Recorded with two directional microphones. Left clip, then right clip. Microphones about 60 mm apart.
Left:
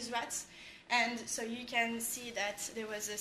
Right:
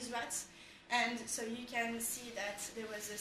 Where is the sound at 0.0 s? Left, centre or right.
Left.